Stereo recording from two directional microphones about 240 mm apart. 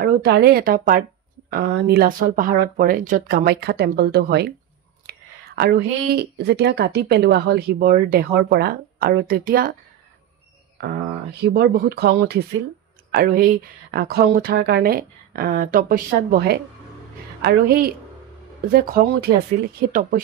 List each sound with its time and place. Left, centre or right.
0.0 s speech: right
5.1 s whispering: right
5.6 s speech: right
10.8 s speech: right